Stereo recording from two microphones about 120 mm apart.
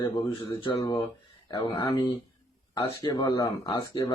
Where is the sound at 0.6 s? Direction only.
50° left (ahead or behind).